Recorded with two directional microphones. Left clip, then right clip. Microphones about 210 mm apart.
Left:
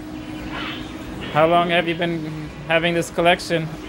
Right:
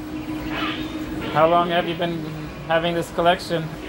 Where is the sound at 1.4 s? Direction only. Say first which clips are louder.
Left 1 dB; 25° left (ahead or behind).